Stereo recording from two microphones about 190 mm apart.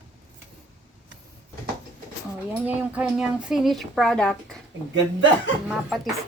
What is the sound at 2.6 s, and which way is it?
Speech, 5° right (ahead or behind).